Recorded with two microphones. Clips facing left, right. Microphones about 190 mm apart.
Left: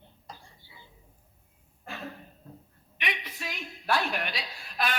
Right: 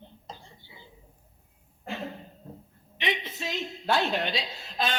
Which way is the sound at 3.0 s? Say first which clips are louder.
Right 5 dB; 25° right (ahead or behind).